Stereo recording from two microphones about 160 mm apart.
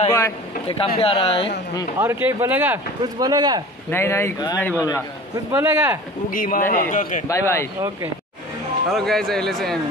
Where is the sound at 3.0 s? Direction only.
25° right (ahead or behind).